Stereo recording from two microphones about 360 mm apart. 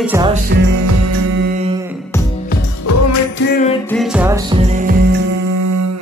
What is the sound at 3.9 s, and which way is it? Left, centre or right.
Music, centre.